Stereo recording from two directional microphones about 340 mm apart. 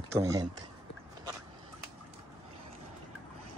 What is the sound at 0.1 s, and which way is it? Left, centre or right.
Speech, centre.